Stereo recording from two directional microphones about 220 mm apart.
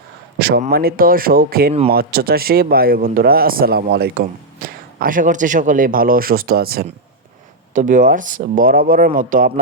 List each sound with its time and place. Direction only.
0.3 s a man's voice: 45° right (ahead or behind)